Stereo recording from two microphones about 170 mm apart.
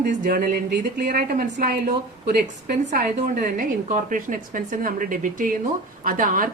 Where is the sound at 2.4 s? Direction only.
45° right (ahead or behind).